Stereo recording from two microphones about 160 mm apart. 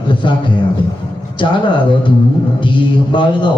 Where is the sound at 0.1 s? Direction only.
30° left (ahead or behind).